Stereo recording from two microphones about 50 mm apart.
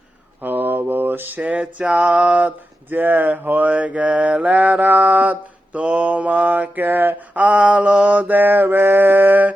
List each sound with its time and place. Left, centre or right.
0.4 s mantra: right
1.4 s mantra: right
2.9 s mantra: right
8.4 s mantra: right